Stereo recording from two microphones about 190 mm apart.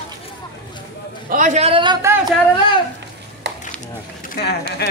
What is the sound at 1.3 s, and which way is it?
Speech, 40° right (ahead or behind).